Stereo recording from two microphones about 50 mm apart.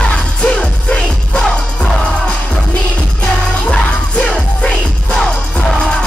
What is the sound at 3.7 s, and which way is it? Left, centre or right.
Music, left.